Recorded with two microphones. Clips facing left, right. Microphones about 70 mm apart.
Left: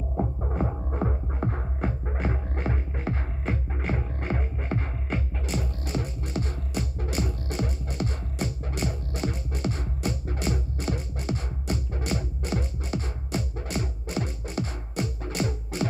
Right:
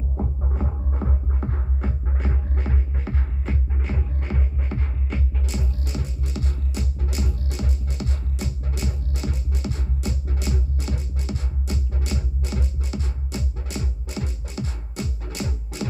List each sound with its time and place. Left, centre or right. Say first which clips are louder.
0.5 s music: left 2 dB; left